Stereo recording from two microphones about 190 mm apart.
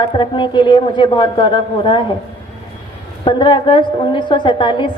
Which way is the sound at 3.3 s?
25° left (ahead or behind).